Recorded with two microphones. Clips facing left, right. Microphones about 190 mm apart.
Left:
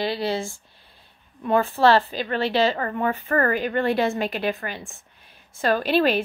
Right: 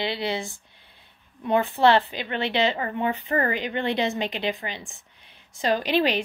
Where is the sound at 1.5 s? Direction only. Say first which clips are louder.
Left 1 dB; 20° right (ahead or behind).